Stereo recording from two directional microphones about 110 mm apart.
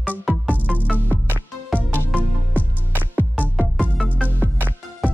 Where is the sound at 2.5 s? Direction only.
15° right (ahead or behind).